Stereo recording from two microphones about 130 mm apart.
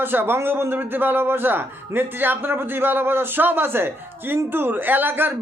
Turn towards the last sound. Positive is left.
turn(degrees=-15)  # may be behind; listen again after turning